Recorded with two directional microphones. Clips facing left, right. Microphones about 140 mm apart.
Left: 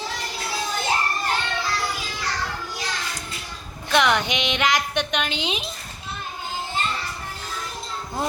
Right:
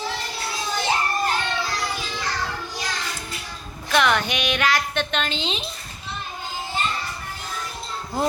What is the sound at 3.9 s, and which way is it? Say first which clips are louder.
Music: even; 15° left (ahead or behind).